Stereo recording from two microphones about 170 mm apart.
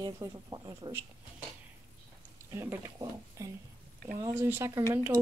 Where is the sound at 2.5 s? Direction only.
15° right (ahead or behind).